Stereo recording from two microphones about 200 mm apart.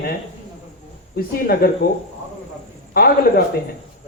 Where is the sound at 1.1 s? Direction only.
50° left (ahead or behind).